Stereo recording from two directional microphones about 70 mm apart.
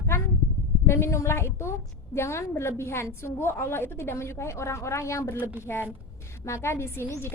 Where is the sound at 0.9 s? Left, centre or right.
Left.